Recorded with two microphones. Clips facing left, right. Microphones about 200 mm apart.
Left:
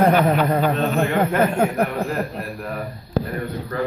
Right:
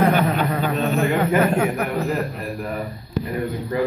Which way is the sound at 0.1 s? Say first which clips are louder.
Left 3 dB; 50° left (ahead or behind).